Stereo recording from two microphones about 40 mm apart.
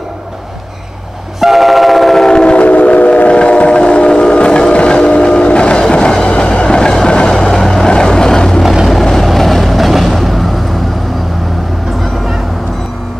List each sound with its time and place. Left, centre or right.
1.4 s vehicle: centre
2.2 s train: left
2.6 s train: left; by 7.9 s centre
7.9 s vehicle: centre